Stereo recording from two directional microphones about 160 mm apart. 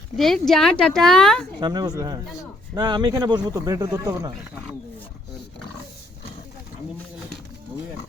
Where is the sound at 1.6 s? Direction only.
25° right (ahead or behind).